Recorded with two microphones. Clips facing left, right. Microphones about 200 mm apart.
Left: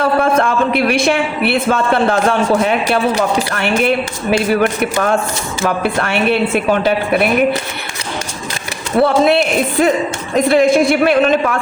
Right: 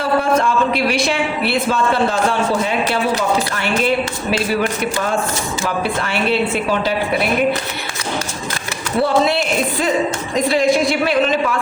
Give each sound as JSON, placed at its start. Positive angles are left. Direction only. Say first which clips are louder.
{"t": 0.0, "sound": "a sound", "louder": "left 3 dB", "side_deg": 55}
{"t": 2.6, "sound": "speech", "louder": "left 3 dB", "side_deg": 60}
{"t": 9.0, "sound": "speech", "louder": "left 4 dB", "side_deg": 60}